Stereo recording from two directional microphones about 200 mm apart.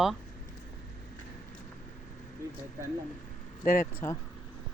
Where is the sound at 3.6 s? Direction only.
40° left (ahead or behind).